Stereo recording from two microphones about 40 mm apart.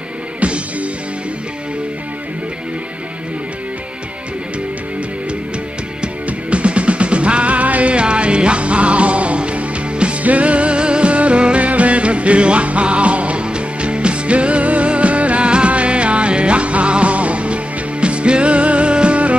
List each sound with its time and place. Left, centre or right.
0.4 s music: right
6.2 s music: right